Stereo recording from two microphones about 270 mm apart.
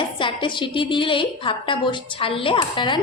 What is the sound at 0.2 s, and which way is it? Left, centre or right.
A woman's voice, centre.